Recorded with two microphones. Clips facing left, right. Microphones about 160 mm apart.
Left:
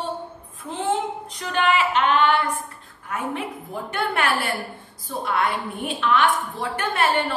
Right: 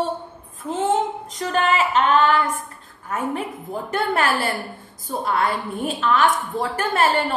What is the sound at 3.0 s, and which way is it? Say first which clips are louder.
Speech: right 3 dB; 40° right (ahead or behind).